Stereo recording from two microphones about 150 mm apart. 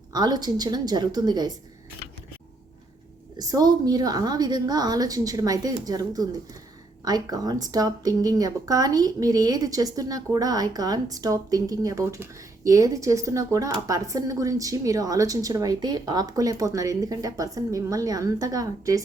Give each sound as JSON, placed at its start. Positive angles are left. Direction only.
{"t": 0.1, "sound": "a woman's voice", "side_deg": -25}
{"t": 3.3, "sound": "a woman's voice", "side_deg": -25}